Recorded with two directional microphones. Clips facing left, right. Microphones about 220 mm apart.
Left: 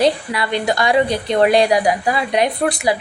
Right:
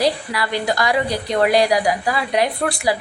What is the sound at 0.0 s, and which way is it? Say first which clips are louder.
A woman's voice: left 3 dB; 20° left (ahead or behind).